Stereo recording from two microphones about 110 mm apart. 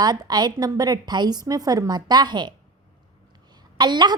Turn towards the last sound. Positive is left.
turn(degrees=-40)  # may be behind; listen again after turning